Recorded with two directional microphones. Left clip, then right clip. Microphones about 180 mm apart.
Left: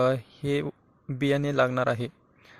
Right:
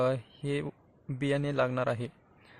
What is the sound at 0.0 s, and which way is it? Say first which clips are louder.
A man's voice: left 5 dB; 20° left (ahead or behind).